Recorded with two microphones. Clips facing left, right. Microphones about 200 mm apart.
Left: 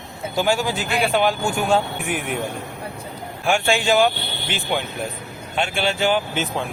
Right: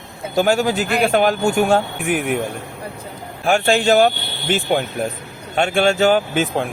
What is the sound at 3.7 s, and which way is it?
Speech, 40° right (ahead or behind).